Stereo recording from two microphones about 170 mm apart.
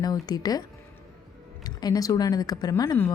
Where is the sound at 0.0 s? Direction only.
25° left (ahead or behind).